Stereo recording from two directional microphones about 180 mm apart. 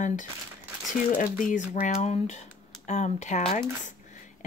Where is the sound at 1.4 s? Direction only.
45° left (ahead or behind).